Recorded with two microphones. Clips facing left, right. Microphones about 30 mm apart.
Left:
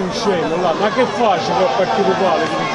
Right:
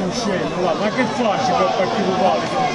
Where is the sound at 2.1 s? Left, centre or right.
Left.